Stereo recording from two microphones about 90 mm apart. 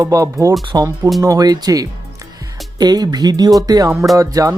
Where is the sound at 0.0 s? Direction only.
40° right (ahead or behind).